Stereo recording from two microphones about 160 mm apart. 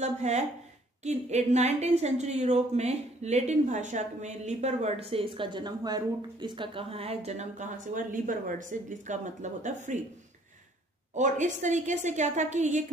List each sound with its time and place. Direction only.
0.0 s a woman's voice: 45° right (ahead or behind)
11.1 s a woman's voice: 50° right (ahead or behind)